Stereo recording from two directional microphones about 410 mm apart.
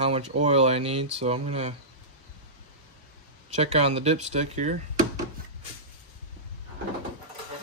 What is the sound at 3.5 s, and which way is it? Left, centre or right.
Speech, centre.